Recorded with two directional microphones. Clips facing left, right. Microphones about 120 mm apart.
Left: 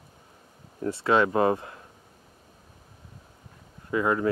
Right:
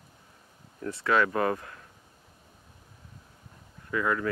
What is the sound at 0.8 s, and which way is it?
Speech, 25° left (ahead or behind).